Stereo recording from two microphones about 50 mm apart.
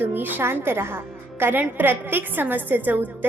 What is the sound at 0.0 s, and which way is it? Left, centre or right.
Speech, right.